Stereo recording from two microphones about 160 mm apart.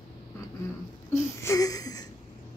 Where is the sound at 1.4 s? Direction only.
20° left (ahead or behind).